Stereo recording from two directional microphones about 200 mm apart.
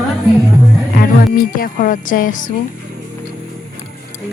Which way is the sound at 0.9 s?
50° left (ahead or behind).